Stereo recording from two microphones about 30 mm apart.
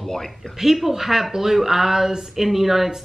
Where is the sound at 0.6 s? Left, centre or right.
Centre.